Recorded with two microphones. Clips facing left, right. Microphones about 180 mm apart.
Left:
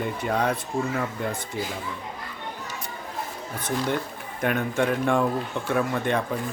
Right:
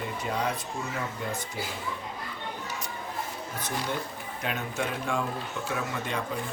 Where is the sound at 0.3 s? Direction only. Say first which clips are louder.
Left 5 dB; 55° left (ahead or behind).